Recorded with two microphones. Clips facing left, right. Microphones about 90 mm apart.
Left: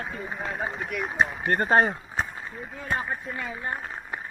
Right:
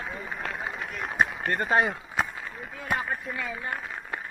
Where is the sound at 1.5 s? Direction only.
40° left (ahead or behind).